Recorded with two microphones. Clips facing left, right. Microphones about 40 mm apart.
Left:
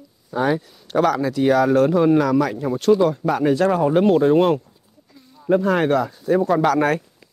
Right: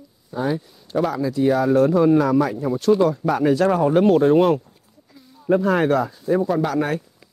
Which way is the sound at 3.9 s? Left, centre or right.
Left.